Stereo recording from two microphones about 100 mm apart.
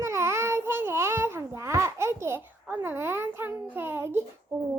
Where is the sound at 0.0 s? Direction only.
30° right (ahead or behind).